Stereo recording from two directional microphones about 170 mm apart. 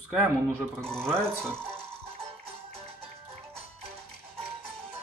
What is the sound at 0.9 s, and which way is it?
Speech, 5° left (ahead or behind).